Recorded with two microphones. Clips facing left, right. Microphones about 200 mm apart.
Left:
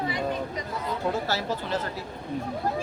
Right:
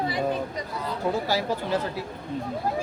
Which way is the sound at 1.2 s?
10° right (ahead or behind).